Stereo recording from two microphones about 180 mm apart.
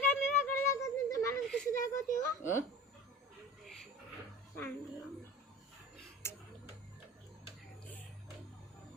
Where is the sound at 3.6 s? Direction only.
Centre (ahead or behind).